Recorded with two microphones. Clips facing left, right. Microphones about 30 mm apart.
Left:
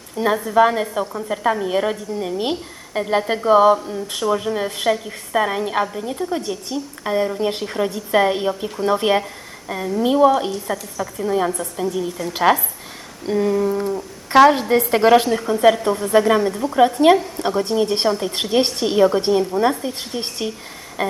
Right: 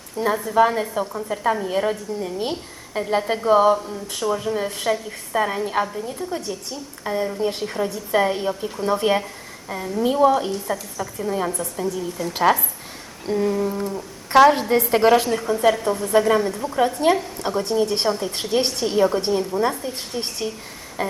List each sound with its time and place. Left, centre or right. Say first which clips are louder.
0.3 s a woman's voice: left 2 dB; centre
6.0 s a woman's voice: left 4 dB; left
16.5 s a woman's voice: left 4 dB; centre
16.7 s speech: left 6 dB; left
18.2 s speech: left 3 dB; left; by 20.5 s centre
21.0 s a sound: left 3 dB; centre